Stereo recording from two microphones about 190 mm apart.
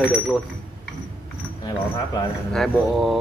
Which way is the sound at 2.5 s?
Centre (ahead or behind).